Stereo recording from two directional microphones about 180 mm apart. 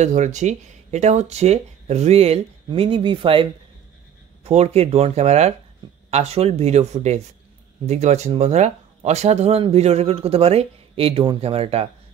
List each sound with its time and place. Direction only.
0.0 s speech: 40° right (ahead or behind)
4.5 s speech: 35° right (ahead or behind)